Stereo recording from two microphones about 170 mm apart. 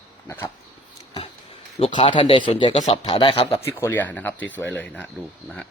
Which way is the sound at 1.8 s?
30° left (ahead or behind).